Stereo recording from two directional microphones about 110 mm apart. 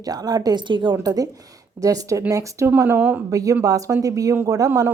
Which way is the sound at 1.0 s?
35° right (ahead or behind).